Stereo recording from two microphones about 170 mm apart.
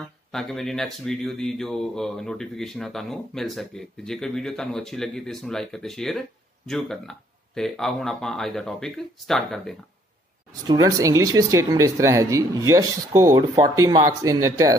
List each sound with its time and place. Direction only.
0.3 s speech: centre (ahead or behind)
10.7 s speech: 20° right (ahead or behind)